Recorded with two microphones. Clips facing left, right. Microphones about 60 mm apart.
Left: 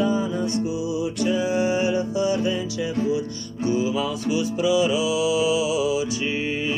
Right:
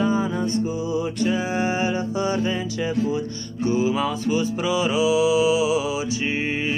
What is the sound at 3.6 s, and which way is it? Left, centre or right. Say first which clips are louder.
Music: right 1 dB; right.